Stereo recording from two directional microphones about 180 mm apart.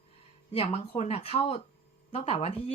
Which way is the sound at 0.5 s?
35° left (ahead or behind).